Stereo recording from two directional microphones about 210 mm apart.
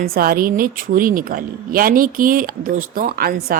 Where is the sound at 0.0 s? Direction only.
45° right (ahead or behind).